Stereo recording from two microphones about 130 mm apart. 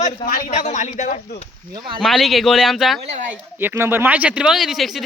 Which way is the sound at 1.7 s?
40° right (ahead or behind).